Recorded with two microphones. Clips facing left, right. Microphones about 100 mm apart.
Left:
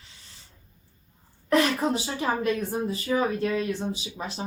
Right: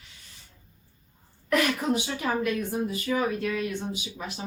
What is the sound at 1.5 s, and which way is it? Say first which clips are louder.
Speech: left 2 dB; 30° left (ahead or behind).